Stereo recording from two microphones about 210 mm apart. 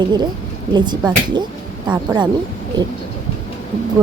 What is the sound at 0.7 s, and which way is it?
Speech, 20° right (ahead or behind).